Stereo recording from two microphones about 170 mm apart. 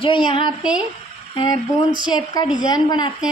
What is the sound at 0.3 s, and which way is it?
Speech, 30° left (ahead or behind).